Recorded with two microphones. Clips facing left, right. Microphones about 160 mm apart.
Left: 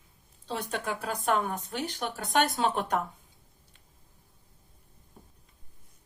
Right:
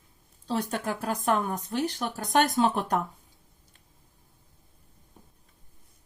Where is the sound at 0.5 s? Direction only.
40° right (ahead or behind).